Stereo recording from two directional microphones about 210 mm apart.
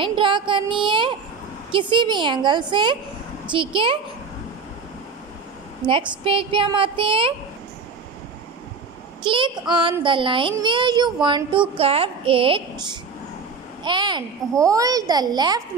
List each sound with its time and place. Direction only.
0.0 s a child's voice: 25° right (ahead or behind)
5.9 s a child's voice: 25° right (ahead or behind)
9.2 s a child's voice: 25° right (ahead or behind)
13.8 s a child's voice: 20° right (ahead or behind)